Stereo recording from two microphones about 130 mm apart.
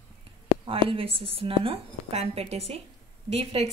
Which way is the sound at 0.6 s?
45° right (ahead or behind).